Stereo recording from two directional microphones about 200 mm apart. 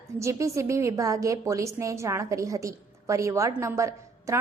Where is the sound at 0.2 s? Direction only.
15° right (ahead or behind).